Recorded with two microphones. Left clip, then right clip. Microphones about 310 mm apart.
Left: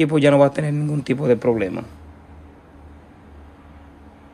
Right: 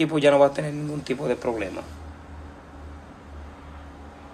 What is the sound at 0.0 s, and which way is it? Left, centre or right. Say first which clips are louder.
Speech: left 3 dB; left.